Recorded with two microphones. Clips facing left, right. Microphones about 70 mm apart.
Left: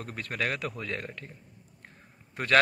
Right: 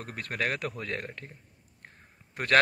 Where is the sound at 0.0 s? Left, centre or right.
Right.